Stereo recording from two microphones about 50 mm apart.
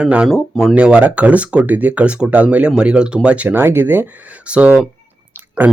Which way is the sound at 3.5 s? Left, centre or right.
Right.